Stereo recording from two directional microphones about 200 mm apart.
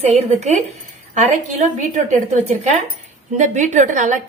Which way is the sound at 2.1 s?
40° right (ahead or behind).